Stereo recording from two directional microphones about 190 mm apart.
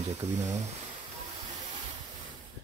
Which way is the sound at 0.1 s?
40° right (ahead or behind).